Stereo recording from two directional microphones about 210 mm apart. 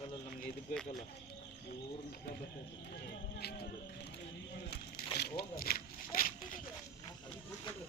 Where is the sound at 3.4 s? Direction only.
50° left (ahead or behind).